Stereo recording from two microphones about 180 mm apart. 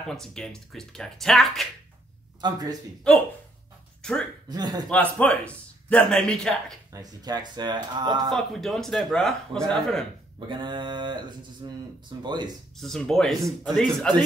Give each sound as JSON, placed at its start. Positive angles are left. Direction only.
{"t": 0.0, "sound": "speech", "side_deg": 5}
{"t": 2.4, "sound": "speech", "side_deg": -20}
{"t": 4.0, "sound": "speech", "side_deg": 5}
{"t": 4.5, "sound": "speech", "side_deg": -20}
{"t": 4.8, "sound": "speech", "side_deg": 10}
{"t": 6.9, "sound": "speech", "side_deg": -20}
{"t": 8.3, "sound": "speech", "side_deg": 0}
{"t": 10.5, "sound": "speech", "side_deg": -25}
{"t": 12.7, "sound": "speech", "side_deg": 0}